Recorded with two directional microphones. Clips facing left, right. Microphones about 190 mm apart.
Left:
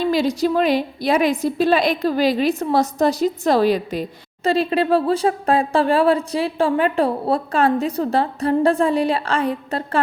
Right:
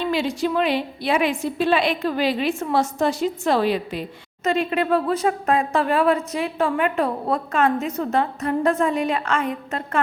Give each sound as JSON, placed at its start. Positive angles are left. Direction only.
{"t": 0.0, "sound": "speech", "side_deg": 40}